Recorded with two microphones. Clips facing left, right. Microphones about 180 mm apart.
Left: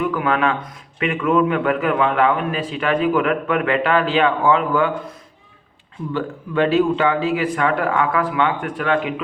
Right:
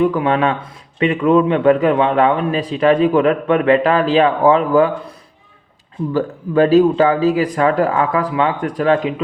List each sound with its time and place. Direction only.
0.0 s a man's voice: 30° right (ahead or behind)
6.1 s a man's voice: 40° right (ahead or behind)